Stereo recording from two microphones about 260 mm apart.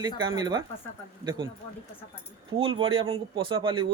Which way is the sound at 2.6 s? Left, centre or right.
Centre.